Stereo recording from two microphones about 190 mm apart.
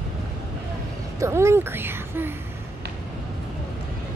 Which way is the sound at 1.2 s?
15° right (ahead or behind).